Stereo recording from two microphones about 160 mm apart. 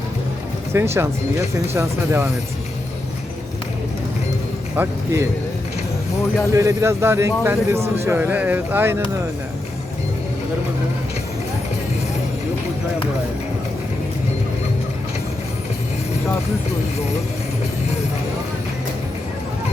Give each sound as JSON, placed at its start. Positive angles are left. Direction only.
{"t": 0.7, "sound": "a man's voice", "side_deg": -15}
{"t": 4.8, "sound": "a man's voice", "side_deg": -15}
{"t": 6.5, "sound": "a man's voice", "side_deg": -20}